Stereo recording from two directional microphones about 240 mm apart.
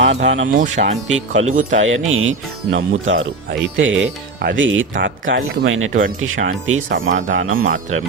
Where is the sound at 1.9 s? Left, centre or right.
Right.